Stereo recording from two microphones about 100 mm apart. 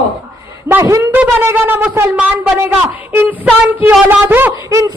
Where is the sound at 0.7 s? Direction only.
25° right (ahead or behind).